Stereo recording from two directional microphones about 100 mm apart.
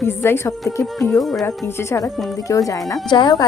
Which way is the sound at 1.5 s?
25° left (ahead or behind).